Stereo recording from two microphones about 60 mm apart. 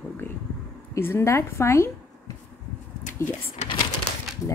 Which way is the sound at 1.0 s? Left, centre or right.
Left.